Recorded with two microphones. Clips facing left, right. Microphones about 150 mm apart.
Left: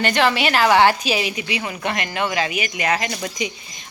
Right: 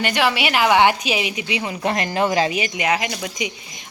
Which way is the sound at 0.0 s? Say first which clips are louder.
Left 2 dB; 10° right (ahead or behind).